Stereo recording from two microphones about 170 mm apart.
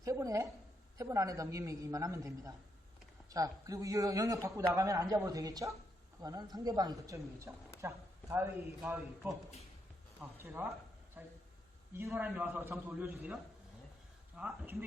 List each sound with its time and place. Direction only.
0.0 s a woman's voice: 20° right (ahead or behind)